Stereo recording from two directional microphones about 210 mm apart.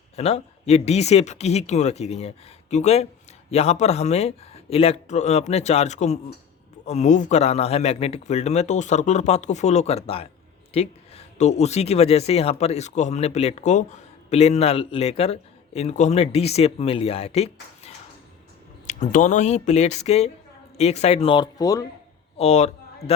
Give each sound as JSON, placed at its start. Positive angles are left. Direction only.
{"t": 0.2, "sound": "a man's voice", "side_deg": 30}
{"t": 22.4, "sound": "a man's voice", "side_deg": 30}